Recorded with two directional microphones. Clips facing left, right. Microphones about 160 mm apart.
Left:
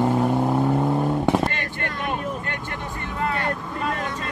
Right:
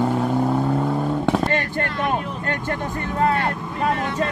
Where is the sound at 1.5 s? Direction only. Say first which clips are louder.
Right 6 dB; 45° right (ahead or behind).